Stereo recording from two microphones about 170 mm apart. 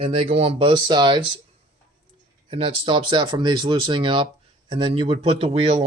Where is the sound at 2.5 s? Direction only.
30° right (ahead or behind).